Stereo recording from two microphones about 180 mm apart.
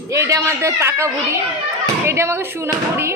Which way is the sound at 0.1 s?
15° right (ahead or behind).